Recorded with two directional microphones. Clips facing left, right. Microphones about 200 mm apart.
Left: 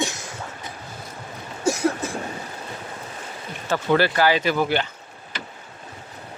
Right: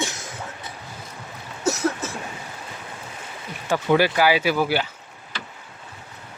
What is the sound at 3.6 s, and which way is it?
Speech, 10° right (ahead or behind).